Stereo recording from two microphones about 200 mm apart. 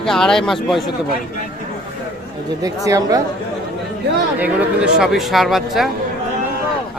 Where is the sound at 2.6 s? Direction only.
15° right (ahead or behind).